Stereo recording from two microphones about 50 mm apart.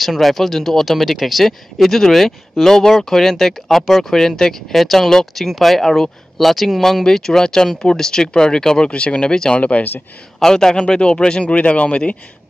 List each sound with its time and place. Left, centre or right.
0.0 s speech: centre
9.6 s speech: left
10.4 s speech: centre